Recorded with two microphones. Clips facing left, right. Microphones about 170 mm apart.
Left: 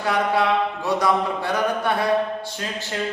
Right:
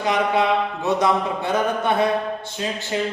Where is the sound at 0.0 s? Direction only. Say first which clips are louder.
Right 1 dB; 20° right (ahead or behind).